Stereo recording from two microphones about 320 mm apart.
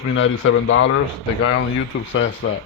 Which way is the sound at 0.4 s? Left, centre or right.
Left.